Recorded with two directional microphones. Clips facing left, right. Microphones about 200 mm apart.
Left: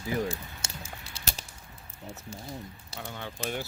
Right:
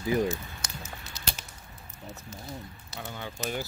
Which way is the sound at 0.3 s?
30° left (ahead or behind).